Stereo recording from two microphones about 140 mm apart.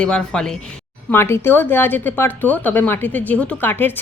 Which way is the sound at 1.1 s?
15° left (ahead or behind).